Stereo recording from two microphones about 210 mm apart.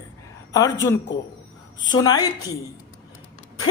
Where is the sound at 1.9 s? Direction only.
20° left (ahead or behind).